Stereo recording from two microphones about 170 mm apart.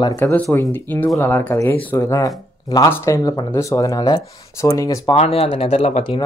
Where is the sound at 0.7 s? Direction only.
10° left (ahead or behind).